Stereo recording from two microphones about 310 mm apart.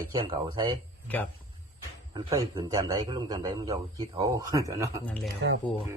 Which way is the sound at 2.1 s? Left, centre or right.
Centre.